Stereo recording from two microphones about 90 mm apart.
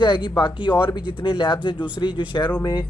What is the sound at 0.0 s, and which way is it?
Speech, 60° left (ahead or behind).